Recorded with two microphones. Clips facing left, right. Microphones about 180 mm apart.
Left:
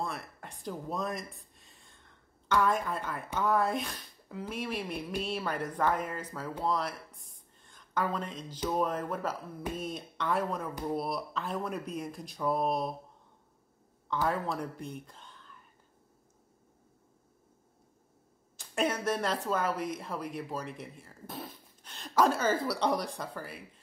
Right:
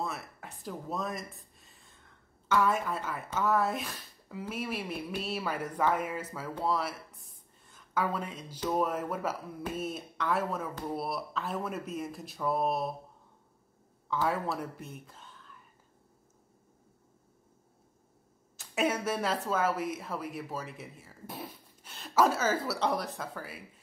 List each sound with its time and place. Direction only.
0.0 s a sound: 5° right (ahead or behind)
2.4 s speech: 5° right (ahead or behind)
14.2 s speech: 5° right (ahead or behind)
18.6 s speech: 10° right (ahead or behind)